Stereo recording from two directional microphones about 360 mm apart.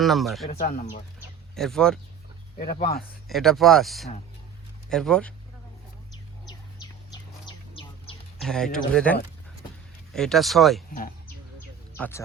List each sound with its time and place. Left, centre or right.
0.0 s speech: centre
0.4 s speech: left
1.5 s speech: centre
2.6 s speech: left
3.2 s speech: centre
7.1 s bird: centre
8.4 s speech: centre
11.9 s speech: centre